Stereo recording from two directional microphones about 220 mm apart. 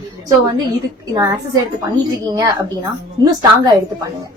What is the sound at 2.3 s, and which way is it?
A woman's voice, 15° right (ahead or behind).